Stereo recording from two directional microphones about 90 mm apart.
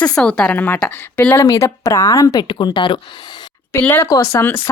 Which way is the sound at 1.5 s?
35° left (ahead or behind).